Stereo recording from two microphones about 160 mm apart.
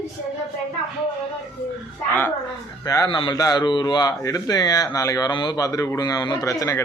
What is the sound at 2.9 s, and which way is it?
A man's voice, 25° left (ahead or behind).